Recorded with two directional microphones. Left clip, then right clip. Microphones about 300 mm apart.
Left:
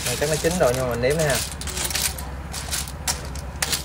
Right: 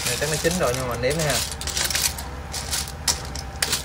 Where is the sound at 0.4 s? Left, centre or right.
Centre.